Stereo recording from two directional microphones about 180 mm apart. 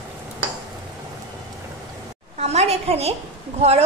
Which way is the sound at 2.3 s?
35° right (ahead or behind).